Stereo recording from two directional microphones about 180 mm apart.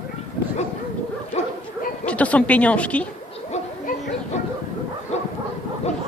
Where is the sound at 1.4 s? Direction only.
40° left (ahead or behind).